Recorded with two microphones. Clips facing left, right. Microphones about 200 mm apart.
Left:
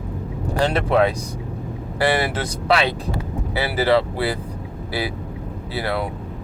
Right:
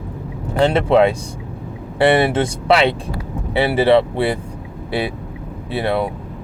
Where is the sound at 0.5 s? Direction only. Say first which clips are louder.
Right 5 dB; 25° right (ahead or behind).